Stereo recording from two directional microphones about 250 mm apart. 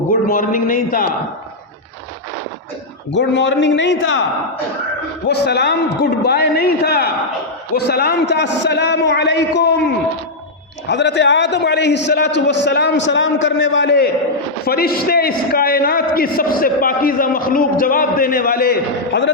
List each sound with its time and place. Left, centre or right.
0.1 s a man's voice: left
3.1 s a man's voice: left
5.3 s a man's voice: left